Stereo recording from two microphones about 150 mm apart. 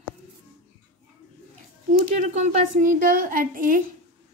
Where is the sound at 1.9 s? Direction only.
60° right (ahead or behind).